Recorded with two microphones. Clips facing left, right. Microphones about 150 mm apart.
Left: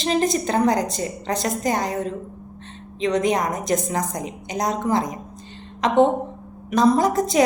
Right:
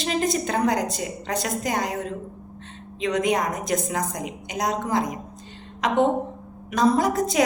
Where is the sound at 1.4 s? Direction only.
35° left (ahead or behind).